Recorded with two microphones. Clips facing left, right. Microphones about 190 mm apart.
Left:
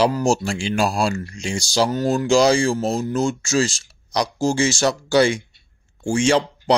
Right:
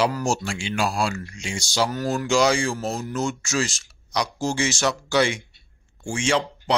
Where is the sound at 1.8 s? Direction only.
25° left (ahead or behind).